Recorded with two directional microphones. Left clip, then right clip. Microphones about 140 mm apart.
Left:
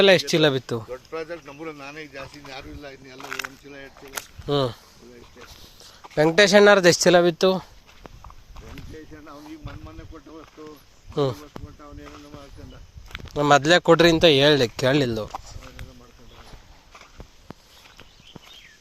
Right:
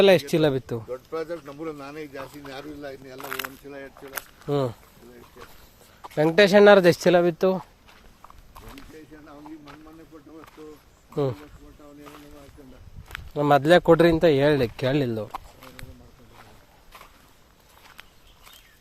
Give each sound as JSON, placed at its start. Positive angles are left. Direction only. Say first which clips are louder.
{"t": 0.0, "sound": "speech", "louder": "left 1 dB", "side_deg": -5}
{"t": 3.2, "sound": "speech", "louder": "left 1 dB", "side_deg": 10}
{"t": 3.7, "sound": "speech", "louder": "right 2 dB", "side_deg": -90}
{"t": 4.4, "sound": "speech", "louder": "left 2 dB", "side_deg": -5}
{"t": 7.2, "sound": "speech", "louder": "left 3 dB", "side_deg": 0}
{"t": 11.1, "sound": "speech", "louder": "left 2 dB", "side_deg": -5}
{"t": 13.1, "sound": "a sound", "louder": "even", "side_deg": 5}
{"t": 13.5, "sound": "speech", "louder": "left 1 dB", "side_deg": -25}
{"t": 14.1, "sound": "speech", "louder": "left 3 dB", "side_deg": -5}